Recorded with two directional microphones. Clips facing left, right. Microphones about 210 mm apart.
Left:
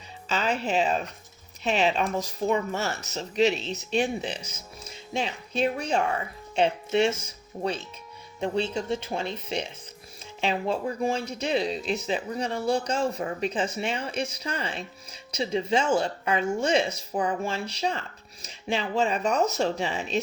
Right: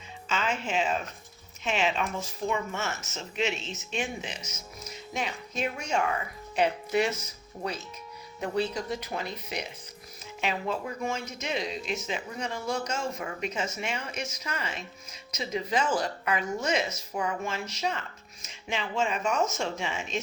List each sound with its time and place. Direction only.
0.3 s speech: 35° left (ahead or behind)